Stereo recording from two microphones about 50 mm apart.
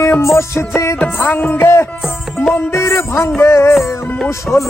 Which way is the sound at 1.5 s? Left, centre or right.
Left.